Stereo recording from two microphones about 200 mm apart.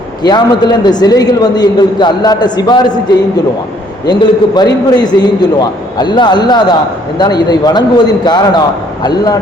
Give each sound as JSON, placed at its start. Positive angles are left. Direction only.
{"t": 0.2, "sound": "a man's voice", "side_deg": 20}
{"t": 4.0, "sound": "a man's voice", "side_deg": 20}